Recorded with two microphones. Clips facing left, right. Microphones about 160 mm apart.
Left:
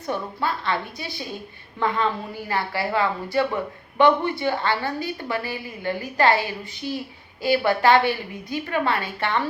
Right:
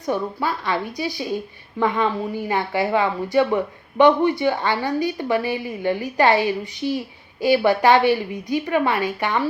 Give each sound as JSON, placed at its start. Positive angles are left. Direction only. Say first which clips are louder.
{"t": 0.0, "sound": "a woman's voice", "louder": "right 3 dB", "side_deg": -15}